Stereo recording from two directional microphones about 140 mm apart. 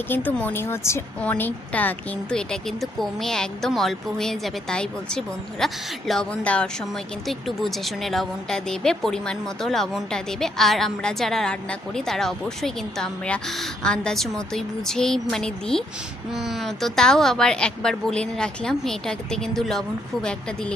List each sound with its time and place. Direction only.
0.1 s a woman's voice: 10° left (ahead or behind)